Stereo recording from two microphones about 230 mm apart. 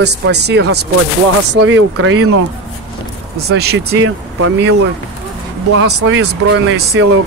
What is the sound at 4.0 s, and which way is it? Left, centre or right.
Speech, right.